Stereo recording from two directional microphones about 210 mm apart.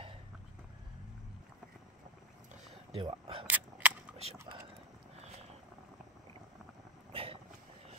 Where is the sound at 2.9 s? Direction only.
30° right (ahead or behind).